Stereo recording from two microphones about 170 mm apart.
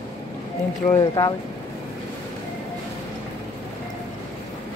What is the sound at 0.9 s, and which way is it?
Speech, 25° left (ahead or behind).